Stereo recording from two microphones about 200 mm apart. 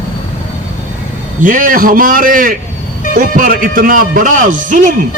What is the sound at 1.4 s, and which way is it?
Speech, 40° right (ahead or behind).